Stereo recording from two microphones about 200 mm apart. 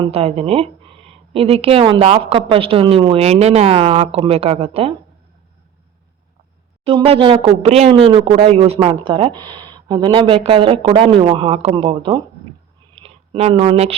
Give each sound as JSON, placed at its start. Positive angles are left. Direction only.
{"t": 0.0, "sound": "speech", "side_deg": -30}
{"t": 6.8, "sound": "speech", "side_deg": -30}
{"t": 13.0, "sound": "a sound", "side_deg": -30}